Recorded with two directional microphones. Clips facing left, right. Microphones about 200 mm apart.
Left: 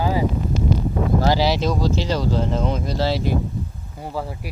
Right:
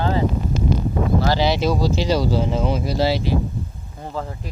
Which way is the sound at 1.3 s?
Centre (ahead or behind).